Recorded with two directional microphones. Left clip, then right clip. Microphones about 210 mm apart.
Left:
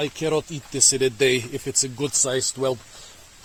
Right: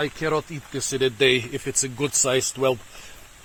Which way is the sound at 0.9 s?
15° left (ahead or behind).